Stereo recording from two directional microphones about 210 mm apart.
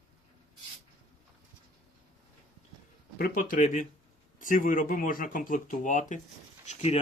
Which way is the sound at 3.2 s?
45° left (ahead or behind).